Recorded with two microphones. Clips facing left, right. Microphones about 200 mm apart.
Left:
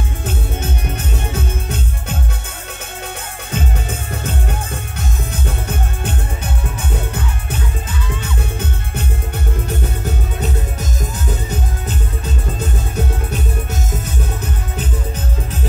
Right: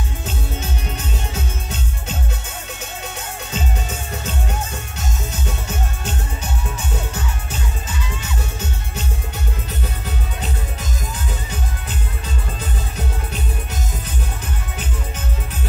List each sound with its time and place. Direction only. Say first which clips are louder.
0.2 s music: left 5 dB; 55° left (ahead or behind)
3.5 s music: left 4 dB; 55° left (ahead or behind)
8.2 s music: left 4 dB; 55° left (ahead or behind)